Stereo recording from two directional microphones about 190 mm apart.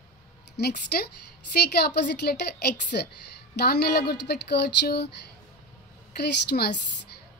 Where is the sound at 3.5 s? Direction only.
60° left (ahead or behind).